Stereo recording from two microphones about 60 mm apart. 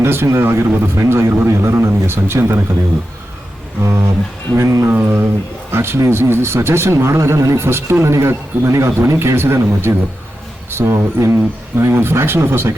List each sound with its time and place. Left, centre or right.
0.0 s speech: right
0.9 s speech: right
3.8 s speech: right
4.5 s speech: right
4.9 s speech: right
5.7 s speech: right